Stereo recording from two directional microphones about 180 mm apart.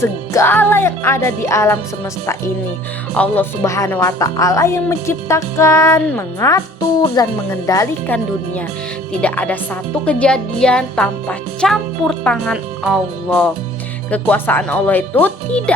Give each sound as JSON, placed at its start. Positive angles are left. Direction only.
{"t": 0.0, "sound": "a woman's voice", "side_deg": 15}
{"t": 3.2, "sound": "a woman's voice", "side_deg": 10}